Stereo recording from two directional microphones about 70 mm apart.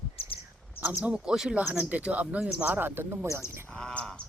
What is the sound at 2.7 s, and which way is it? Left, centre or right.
Speech, right.